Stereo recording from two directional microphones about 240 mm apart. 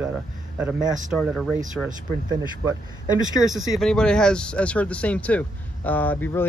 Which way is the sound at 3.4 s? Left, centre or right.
Centre.